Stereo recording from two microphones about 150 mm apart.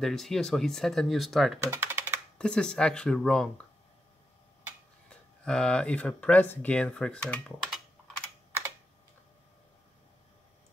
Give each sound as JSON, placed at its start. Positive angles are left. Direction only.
{"t": 0.0, "sound": "speech", "side_deg": 5}
{"t": 1.7, "sound": "typing", "side_deg": -15}
{"t": 2.3, "sound": "speech", "side_deg": 5}
{"t": 5.1, "sound": "speech", "side_deg": 5}
{"t": 7.6, "sound": "typing", "side_deg": 0}
{"t": 8.5, "sound": "computer keyboard", "side_deg": -15}